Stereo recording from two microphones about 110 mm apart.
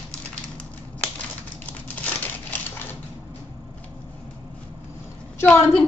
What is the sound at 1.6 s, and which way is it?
Crumpling, 10° left (ahead or behind).